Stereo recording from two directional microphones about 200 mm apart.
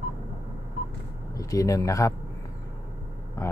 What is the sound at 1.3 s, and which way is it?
Speech, 15° left (ahead or behind).